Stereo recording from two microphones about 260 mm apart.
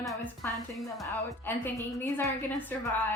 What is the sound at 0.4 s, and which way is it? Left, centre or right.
Speech, centre.